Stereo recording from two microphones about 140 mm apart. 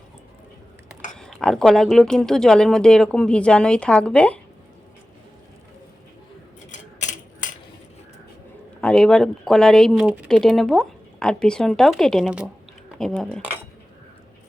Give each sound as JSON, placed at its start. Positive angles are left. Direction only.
{"t": 1.1, "sound": "speech", "side_deg": 5}
{"t": 6.7, "sound": "a sound", "side_deg": 65}
{"t": 8.8, "sound": "speech", "side_deg": 5}
{"t": 13.0, "sound": "speech", "side_deg": 5}